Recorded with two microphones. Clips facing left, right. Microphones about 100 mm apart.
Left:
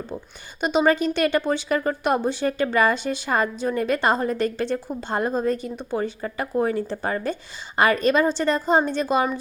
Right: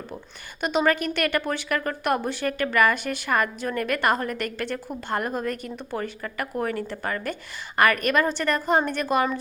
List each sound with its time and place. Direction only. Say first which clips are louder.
0.6 s speech: left 3 dB; 20° left (ahead or behind)